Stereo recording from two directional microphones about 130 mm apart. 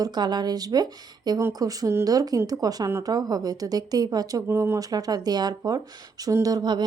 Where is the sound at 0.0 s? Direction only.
35° right (ahead or behind).